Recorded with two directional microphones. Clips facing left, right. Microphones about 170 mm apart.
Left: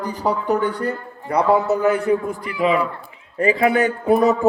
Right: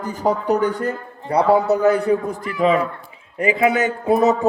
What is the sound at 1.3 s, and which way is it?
A man's voice, 35° right (ahead or behind).